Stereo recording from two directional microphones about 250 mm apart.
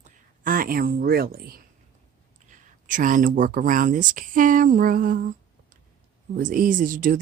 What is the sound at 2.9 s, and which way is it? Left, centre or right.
Speech, right.